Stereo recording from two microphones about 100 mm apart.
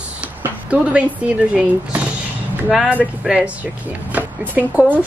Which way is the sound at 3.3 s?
10° right (ahead or behind).